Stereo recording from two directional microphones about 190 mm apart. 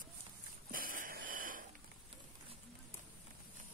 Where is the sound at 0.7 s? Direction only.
50° right (ahead or behind).